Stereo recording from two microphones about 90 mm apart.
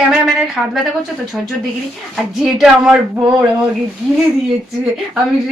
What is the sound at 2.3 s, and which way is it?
A woman's voice, 5° right (ahead or behind).